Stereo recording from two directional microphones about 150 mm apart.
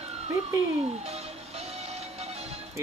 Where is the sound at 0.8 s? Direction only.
45° right (ahead or behind).